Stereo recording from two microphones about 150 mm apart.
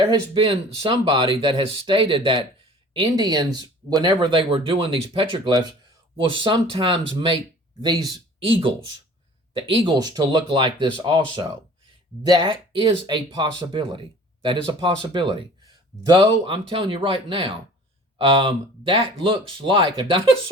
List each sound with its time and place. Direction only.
0.4 s speech: 35° right (ahead or behind)
8.4 s speech: 35° right (ahead or behind)